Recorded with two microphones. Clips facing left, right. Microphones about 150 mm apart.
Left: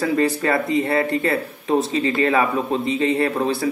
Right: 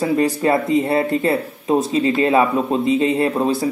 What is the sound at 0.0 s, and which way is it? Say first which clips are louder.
A man's voice: right 2 dB; 20° right (ahead or behind).